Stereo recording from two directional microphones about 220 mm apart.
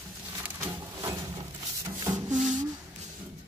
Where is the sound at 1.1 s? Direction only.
20° right (ahead or behind).